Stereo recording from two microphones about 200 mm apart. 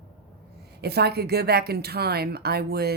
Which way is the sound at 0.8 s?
55° right (ahead or behind).